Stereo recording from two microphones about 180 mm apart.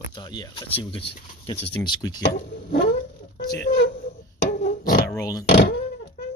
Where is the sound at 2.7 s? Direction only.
65° left (ahead or behind).